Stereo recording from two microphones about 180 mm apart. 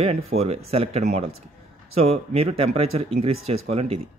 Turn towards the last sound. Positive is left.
turn(degrees=-35)  # may be behind; listen again after turning